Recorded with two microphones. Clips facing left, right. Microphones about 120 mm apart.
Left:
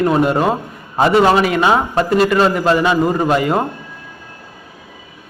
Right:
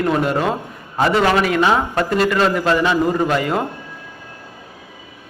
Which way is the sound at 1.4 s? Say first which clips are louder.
Left 2 dB; 5° left (ahead or behind).